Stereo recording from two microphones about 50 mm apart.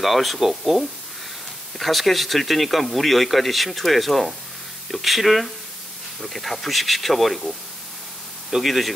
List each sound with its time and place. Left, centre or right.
0.0 s speech: centre